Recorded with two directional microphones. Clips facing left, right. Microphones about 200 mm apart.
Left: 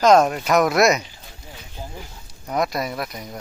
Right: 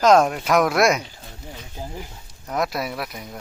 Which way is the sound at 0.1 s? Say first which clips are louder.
Even; 5° left (ahead or behind).